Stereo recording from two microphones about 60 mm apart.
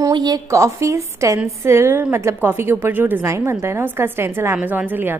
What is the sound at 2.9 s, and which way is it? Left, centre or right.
Speech, right.